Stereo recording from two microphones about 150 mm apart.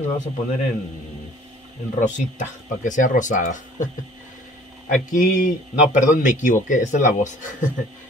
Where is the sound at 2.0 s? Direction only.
55° left (ahead or behind).